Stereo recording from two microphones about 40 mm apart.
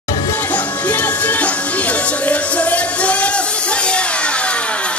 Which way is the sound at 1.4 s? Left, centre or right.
Left.